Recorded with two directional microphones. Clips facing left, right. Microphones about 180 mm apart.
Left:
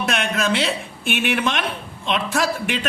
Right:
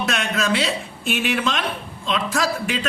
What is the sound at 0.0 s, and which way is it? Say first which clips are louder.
A woman's voice: left 1 dB; 55° left (ahead or behind).